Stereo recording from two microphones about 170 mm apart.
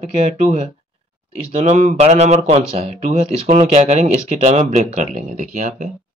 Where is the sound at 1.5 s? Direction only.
40° right (ahead or behind).